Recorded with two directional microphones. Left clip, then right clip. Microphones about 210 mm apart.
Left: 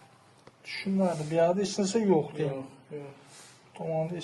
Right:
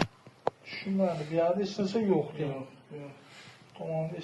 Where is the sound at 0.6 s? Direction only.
35° left (ahead or behind).